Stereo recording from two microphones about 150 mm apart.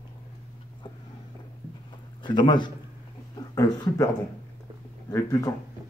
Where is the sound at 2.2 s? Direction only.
30° left (ahead or behind).